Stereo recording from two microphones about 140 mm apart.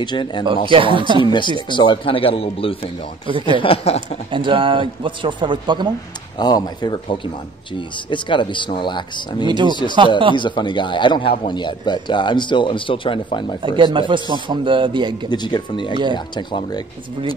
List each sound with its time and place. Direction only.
0.0 s speech: 35° left (ahead or behind)
0.7 s speech: 35° right (ahead or behind)
1.2 s speech: 35° left (ahead or behind)
3.3 s speech: 35° right (ahead or behind)
3.5 s speech: 40° left (ahead or behind)
4.3 s speech: 35° right (ahead or behind)
6.3 s speech: 30° left (ahead or behind)
9.5 s speech: 35° right (ahead or behind)
10.3 s speech: 35° left (ahead or behind)
13.7 s speech: 35° right (ahead or behind)
15.2 s speech: 30° left (ahead or behind)